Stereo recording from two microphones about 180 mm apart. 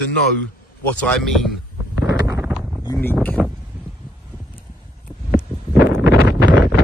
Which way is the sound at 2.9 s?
10° left (ahead or behind).